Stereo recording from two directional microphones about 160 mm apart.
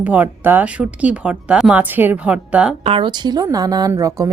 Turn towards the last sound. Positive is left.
turn(degrees=-20)  # may be behind; listen again after turning